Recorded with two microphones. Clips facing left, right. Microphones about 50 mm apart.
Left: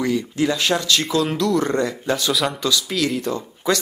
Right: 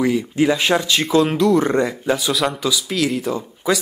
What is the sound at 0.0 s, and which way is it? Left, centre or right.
Speech, centre.